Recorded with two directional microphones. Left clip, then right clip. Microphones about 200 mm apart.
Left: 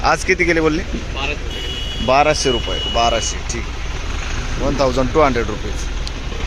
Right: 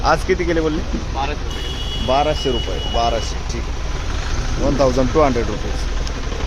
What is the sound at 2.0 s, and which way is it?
Speech, 30° left (ahead or behind).